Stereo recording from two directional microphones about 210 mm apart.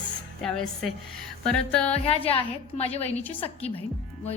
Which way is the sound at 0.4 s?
Centre (ahead or behind).